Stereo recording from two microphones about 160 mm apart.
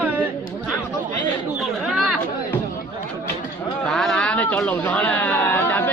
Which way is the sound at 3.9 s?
Centre (ahead or behind).